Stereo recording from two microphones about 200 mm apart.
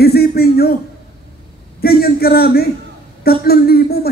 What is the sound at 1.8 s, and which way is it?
A man's voice, 50° left (ahead or behind).